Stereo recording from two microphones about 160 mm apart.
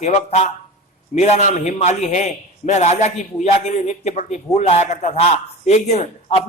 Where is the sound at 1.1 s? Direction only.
50° left (ahead or behind).